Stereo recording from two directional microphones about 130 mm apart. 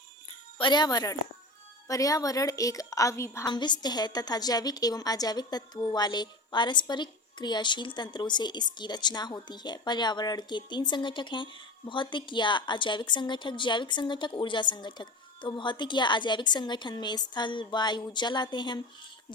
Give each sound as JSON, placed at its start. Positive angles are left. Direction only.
{"t": 0.6, "sound": "a woman's voice", "side_deg": 35}
{"t": 3.5, "sound": "a woman's voice", "side_deg": 35}